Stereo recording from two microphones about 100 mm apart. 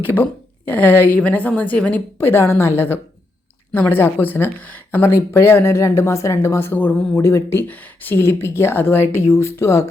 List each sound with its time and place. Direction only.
0.7 s speech: 20° left (ahead or behind)